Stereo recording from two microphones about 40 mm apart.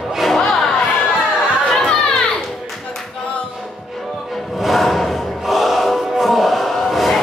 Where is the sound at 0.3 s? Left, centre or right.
Centre.